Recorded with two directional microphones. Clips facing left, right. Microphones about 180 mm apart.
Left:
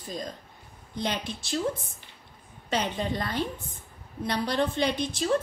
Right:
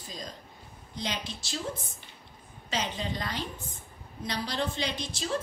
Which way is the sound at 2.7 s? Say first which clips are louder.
Left 4 dB; 55° left (ahead or behind).